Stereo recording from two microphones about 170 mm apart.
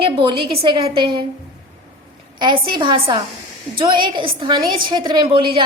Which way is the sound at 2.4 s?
25° right (ahead or behind).